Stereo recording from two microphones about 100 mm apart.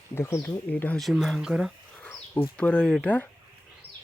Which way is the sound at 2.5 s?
10° left (ahead or behind).